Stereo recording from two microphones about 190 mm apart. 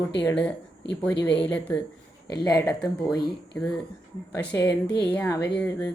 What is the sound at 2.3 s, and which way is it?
Speech, 20° left (ahead or behind).